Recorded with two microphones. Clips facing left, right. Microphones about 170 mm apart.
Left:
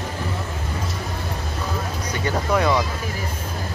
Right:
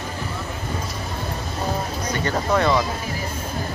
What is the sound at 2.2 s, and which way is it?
Speech, 10° left (ahead or behind).